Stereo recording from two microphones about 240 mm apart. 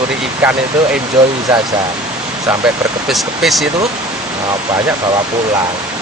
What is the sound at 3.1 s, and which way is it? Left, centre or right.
Speech, centre.